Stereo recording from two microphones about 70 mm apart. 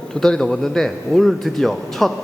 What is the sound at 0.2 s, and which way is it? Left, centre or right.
A man's voice, centre.